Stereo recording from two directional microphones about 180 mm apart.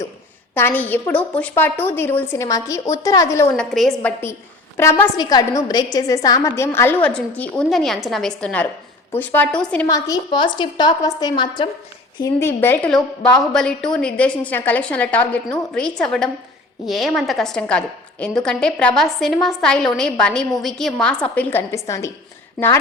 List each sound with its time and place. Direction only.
0.5 s a woman's voice: 10° left (ahead or behind)
3.7 s a woman's voice: centre (ahead or behind)
4.8 s a woman's voice: 15° left (ahead or behind)
9.8 s a woman's voice: 20° left (ahead or behind)
12.2 s a woman's voice: 15° left (ahead or behind)
22.6 s a woman's voice: centre (ahead or behind)